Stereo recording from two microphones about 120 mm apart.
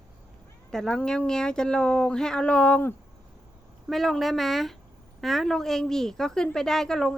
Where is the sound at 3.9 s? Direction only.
Centre (ahead or behind).